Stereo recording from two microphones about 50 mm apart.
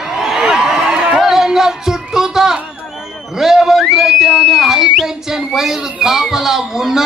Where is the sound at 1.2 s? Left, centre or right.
Centre.